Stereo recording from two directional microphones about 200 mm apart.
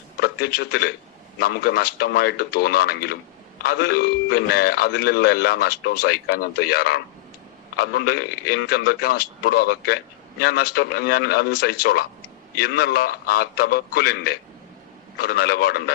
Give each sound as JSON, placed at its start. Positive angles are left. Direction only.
{"t": 0.2, "sound": "a man's voice", "side_deg": 50}